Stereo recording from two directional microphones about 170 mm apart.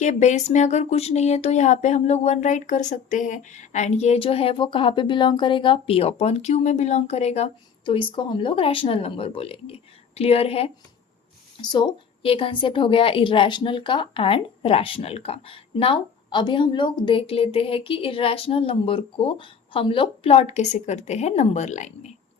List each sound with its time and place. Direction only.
0.0 s speech: 45° left (ahead or behind)
11.6 s speech: 25° left (ahead or behind); by 22.1 s 45° left (ahead or behind)